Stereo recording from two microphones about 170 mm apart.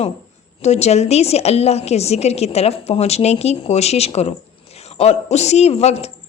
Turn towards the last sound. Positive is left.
turn(degrees=40)  # may be behind; listen again after turning